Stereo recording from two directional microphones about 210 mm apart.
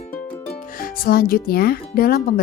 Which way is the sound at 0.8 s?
45° left (ahead or behind).